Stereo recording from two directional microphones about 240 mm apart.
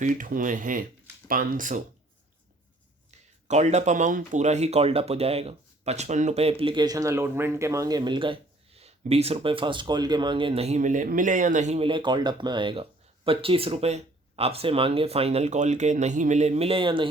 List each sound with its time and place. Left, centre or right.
0.0 s speech: right
3.1 s speech: right